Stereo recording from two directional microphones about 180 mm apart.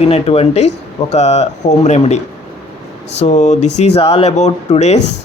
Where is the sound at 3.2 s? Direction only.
40° left (ahead or behind).